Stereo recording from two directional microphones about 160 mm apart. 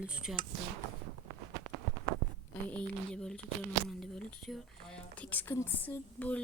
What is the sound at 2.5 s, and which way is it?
Speech, 10° left (ahead or behind).